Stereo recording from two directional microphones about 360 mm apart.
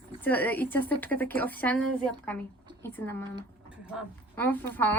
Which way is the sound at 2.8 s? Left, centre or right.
Centre.